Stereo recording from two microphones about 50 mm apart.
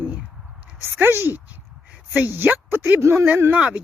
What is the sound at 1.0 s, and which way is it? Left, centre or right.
Speech, right.